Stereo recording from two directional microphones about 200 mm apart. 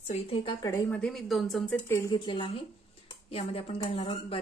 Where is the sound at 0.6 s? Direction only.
15° left (ahead or behind).